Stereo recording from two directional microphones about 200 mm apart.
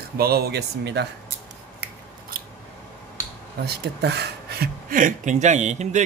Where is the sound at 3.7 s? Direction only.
55° right (ahead or behind); by 6.0 s 35° right (ahead or behind).